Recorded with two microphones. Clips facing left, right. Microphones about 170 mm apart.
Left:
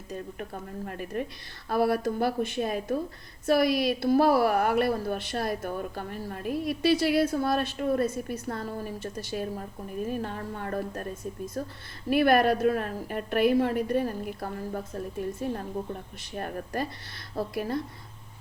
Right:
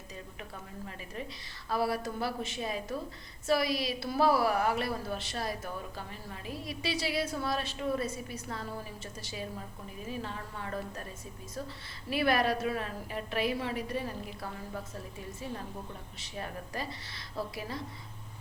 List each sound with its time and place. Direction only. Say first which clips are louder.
0.1 s a woman's voice: left 10 dB; 50° left (ahead or behind)